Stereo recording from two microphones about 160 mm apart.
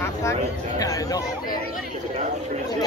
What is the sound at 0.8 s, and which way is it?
Speech, 20° left (ahead or behind).